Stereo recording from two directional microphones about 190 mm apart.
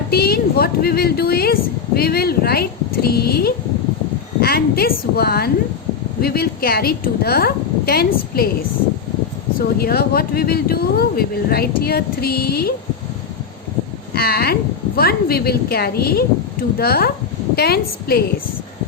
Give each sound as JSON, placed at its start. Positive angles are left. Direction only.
{"t": 0.1, "sound": "a woman's voice", "side_deg": 55}
{"t": 9.6, "sound": "a woman's voice", "side_deg": 55}
{"t": 14.2, "sound": "a woman's voice", "side_deg": 55}